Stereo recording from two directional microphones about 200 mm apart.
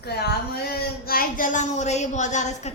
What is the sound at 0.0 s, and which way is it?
A woman's voice, 55° left (ahead or behind).